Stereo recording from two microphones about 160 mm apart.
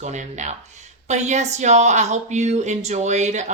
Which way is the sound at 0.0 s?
45° right (ahead or behind).